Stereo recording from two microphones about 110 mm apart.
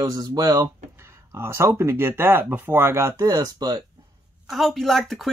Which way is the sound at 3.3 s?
35° right (ahead or behind).